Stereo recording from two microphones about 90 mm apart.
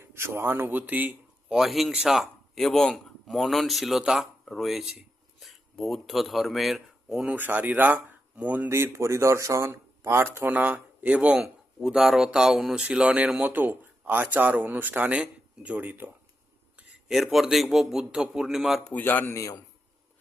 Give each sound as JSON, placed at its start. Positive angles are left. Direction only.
{"t": 0.0, "sound": "speech", "side_deg": -30}
{"t": 1.5, "sound": "speech", "side_deg": 0}
{"t": 7.3, "sound": "speech", "side_deg": -20}
{"t": 8.7, "sound": "speech", "side_deg": -30}
{"t": 16.7, "sound": "speech", "side_deg": -5}
{"t": 18.9, "sound": "speech", "side_deg": 20}